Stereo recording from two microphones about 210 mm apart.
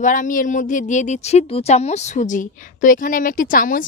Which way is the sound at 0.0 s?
40° left (ahead or behind).